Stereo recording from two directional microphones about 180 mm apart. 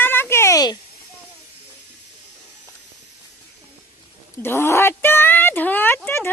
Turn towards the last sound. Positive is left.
turn(degrees=15)  # may be behind; listen again after turning